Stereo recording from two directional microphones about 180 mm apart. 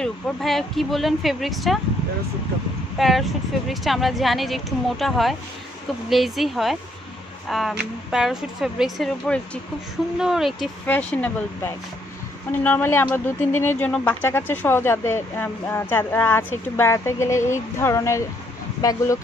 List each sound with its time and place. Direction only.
0.0 s speech: centre (ahead or behind)
3.0 s speech: centre (ahead or behind); by 19.1 s 20° left (ahead or behind)